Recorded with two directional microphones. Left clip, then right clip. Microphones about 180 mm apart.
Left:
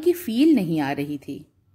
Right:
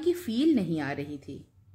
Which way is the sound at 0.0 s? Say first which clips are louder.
Left 7 dB; 30° left (ahead or behind).